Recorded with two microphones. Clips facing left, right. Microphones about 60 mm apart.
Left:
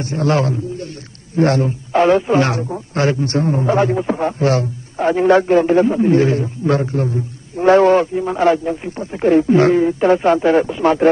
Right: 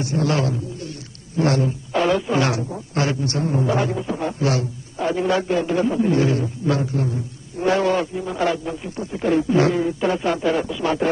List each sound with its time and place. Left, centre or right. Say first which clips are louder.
0.0 s a man's voice: left 4 dB; left